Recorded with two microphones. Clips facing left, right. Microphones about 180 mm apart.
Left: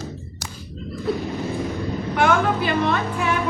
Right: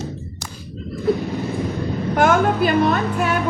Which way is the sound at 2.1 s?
45° right (ahead or behind).